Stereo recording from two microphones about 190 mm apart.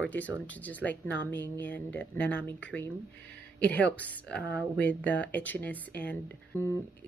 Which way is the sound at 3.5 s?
5° left (ahead or behind).